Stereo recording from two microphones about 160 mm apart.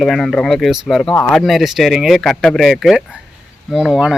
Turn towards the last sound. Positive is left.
turn(degrees=-5)  # may be behind; listen again after turning